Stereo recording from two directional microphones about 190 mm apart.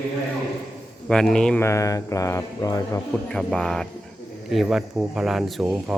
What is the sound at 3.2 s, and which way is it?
Speech, 5° left (ahead or behind).